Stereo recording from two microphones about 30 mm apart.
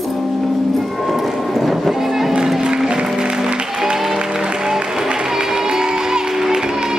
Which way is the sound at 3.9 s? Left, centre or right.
Centre.